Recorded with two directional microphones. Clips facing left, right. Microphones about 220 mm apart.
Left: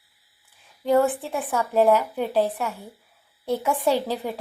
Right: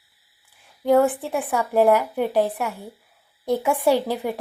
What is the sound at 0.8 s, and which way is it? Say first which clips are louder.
A woman's voice: right 2 dB; 15° right (ahead or behind).